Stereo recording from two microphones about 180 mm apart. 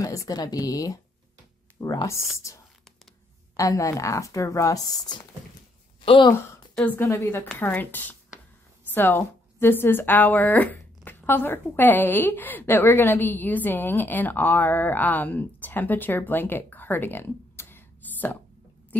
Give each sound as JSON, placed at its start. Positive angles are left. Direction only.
{"t": 0.0, "sound": "a woman's voice", "side_deg": 20}
{"t": 3.5, "sound": "a woman's voice", "side_deg": 20}
{"t": 6.7, "sound": "a woman's voice", "side_deg": 10}